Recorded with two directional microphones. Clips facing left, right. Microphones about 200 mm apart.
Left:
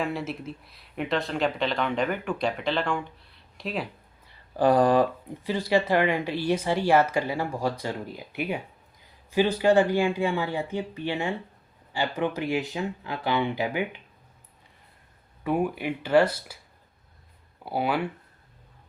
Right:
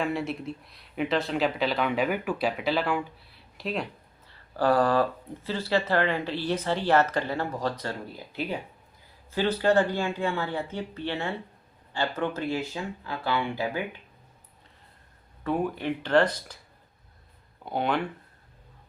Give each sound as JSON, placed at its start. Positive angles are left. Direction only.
{"t": 0.0, "sound": "speech", "side_deg": 0}
{"t": 4.3, "sound": "speech", "side_deg": 15}
{"t": 15.4, "sound": "speech", "side_deg": 10}
{"t": 17.7, "sound": "speech", "side_deg": 5}